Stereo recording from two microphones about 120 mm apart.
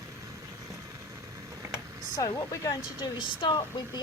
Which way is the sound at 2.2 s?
25° left (ahead or behind).